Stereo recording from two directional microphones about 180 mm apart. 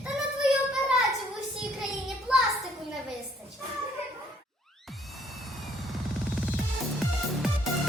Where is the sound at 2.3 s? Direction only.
5° right (ahead or behind).